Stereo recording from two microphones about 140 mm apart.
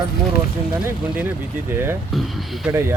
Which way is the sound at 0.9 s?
15° right (ahead or behind).